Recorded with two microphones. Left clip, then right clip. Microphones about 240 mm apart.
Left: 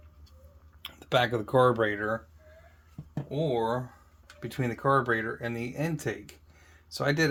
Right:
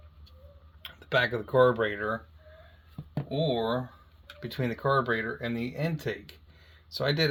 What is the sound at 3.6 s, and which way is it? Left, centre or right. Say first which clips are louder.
Speech: left 1 dB; left.